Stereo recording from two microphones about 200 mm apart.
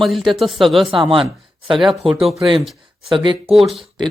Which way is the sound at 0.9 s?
25° right (ahead or behind).